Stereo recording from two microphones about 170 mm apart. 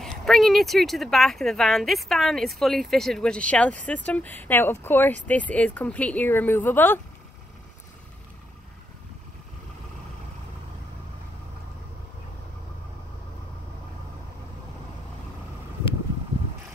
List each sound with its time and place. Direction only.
0.0 s a woman's voice: centre (ahead or behind)